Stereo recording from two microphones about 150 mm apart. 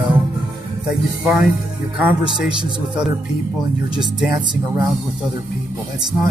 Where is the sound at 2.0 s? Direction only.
10° right (ahead or behind).